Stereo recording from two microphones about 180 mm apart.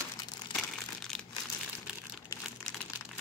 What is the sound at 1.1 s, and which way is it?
Crumpling, centre (ahead or behind).